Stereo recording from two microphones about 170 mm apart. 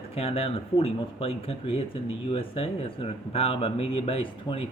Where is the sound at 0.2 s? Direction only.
35° left (ahead or behind).